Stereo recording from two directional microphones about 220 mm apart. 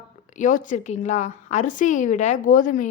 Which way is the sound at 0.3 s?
35° left (ahead or behind).